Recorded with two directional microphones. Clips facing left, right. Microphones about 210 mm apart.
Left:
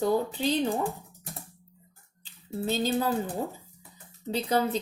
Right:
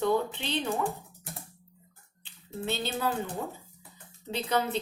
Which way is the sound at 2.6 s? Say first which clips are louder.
Left 4 dB; 40° left (ahead or behind).